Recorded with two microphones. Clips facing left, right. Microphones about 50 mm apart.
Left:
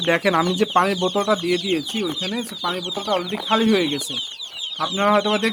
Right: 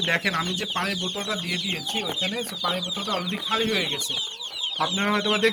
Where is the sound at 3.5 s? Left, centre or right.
Centre.